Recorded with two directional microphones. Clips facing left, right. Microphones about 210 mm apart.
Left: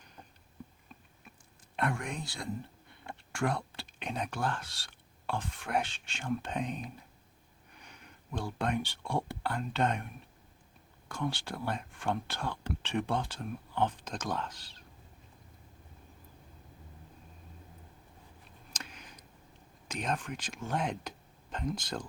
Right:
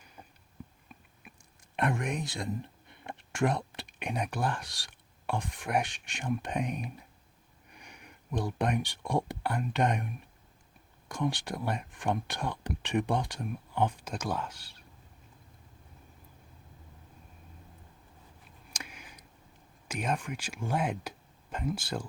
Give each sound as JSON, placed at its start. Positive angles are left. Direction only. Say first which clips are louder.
{"t": 1.7, "sound": "speech", "louder": "right 3 dB", "side_deg": -20}
{"t": 11.1, "sound": "speech", "louder": "right 3 dB", "side_deg": -15}
{"t": 18.7, "sound": "a sound", "louder": "right 1 dB", "side_deg": -10}
{"t": 19.9, "sound": "speech", "louder": "right 2 dB", "side_deg": -10}